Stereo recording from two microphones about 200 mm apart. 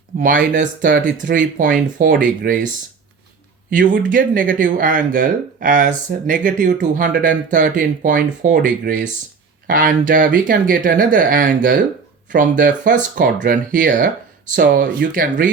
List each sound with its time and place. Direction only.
0.2 s speech: 40° right (ahead or behind)
3.7 s speech: 40° right (ahead or behind)